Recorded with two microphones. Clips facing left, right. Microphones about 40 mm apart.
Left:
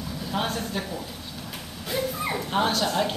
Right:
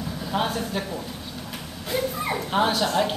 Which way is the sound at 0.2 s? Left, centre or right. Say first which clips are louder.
Right 2 dB; centre.